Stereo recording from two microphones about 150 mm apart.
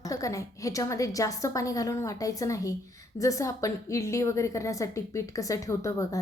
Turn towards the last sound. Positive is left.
turn(degrees=25)  # may be behind; listen again after turning